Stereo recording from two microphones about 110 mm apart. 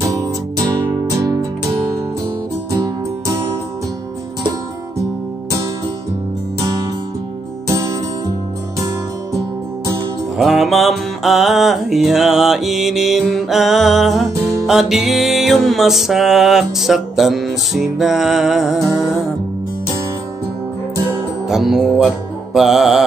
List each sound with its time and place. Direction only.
0.8 s music: 30° right (ahead or behind)
7.6 s music: 25° right (ahead or behind)
10.3 s music: centre (ahead or behind)
21.5 s music: 5° right (ahead or behind)